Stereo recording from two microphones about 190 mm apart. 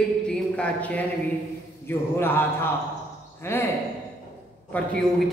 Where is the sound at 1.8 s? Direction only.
10° left (ahead or behind).